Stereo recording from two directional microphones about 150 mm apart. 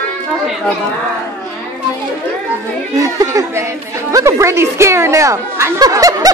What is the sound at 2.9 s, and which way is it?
Speech, 20° right (ahead or behind).